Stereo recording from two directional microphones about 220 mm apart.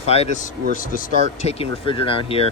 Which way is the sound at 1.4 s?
25° left (ahead or behind).